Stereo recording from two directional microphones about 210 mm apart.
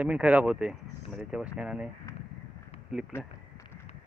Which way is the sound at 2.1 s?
15° left (ahead or behind).